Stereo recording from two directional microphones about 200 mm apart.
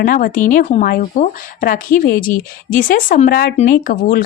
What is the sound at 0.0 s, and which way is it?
Speech, 45° left (ahead or behind).